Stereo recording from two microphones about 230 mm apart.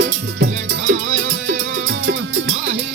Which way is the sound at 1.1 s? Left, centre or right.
Right.